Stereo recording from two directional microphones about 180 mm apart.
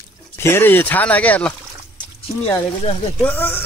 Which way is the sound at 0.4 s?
10° left (ahead or behind).